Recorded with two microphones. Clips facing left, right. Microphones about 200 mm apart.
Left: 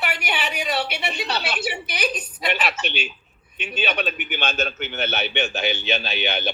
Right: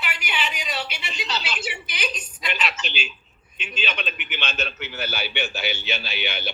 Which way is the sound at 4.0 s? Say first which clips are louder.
Left 6 dB; 40° left (ahead or behind).